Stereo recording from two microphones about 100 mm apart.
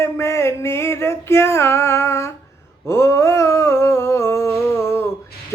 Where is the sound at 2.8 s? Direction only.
25° left (ahead or behind).